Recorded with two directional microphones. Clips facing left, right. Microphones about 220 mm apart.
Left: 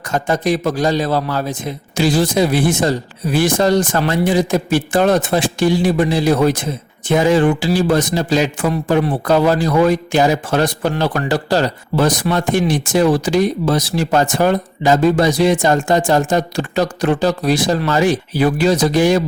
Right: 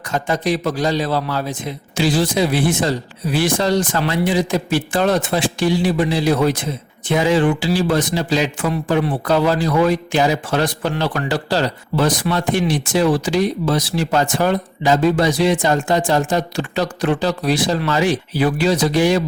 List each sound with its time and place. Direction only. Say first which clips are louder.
0.1 s a man's voice: left 3 dB; 45° left (ahead or behind)